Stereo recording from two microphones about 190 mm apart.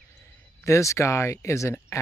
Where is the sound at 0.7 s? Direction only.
15° left (ahead or behind).